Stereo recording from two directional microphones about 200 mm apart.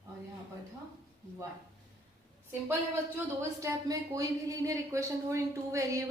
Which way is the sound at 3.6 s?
15° right (ahead or behind).